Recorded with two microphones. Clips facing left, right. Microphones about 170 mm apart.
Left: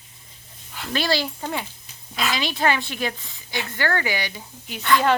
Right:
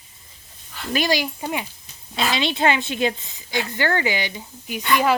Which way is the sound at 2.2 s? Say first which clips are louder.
Right 3 dB; 25° right (ahead or behind).